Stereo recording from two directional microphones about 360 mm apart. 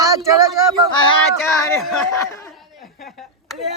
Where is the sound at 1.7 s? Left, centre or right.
Centre.